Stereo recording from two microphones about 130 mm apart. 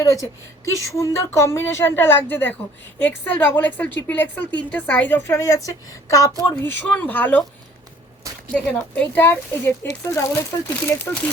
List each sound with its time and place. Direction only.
0.0 s a woman's voice: 25° left (ahead or behind)
8.5 s a woman's voice: 10° left (ahead or behind)